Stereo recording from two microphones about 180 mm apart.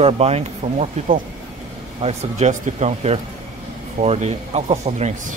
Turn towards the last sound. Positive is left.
turn(degrees=-35)  # may be behind; listen again after turning